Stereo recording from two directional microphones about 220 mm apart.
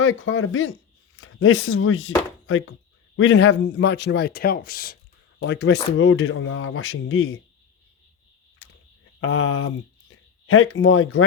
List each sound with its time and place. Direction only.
0.0 s a man's voice: 65° left (ahead or behind); by 4.9 s 40° left (ahead or behind)
5.4 s speech: 50° left (ahead or behind)
8.6 s a sound: 65° left (ahead or behind)
9.2 s speech: 70° left (ahead or behind)